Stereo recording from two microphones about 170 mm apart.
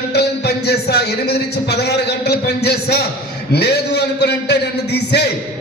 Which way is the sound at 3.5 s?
75° left (ahead or behind).